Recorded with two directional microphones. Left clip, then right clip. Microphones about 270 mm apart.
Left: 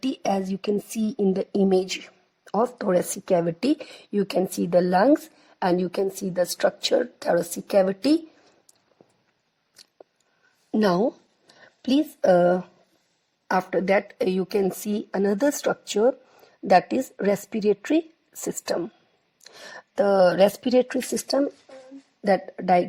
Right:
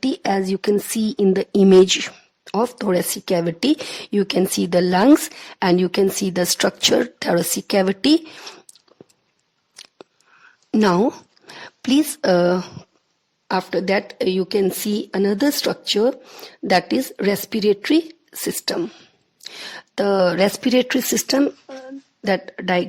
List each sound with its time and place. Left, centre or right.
0.0 s speech: centre
3.4 s speech: right
4.7 s a woman's voice: right
5.7 s speech: right
6.3 s a woman's voice: right
7.9 s speech: right
10.7 s a woman's voice: right
11.0 s a sound: right
11.8 s a woman's voice: right
12.2 s a woman's voice: centre
20.4 s speech: right
21.1 s a woman's voice: right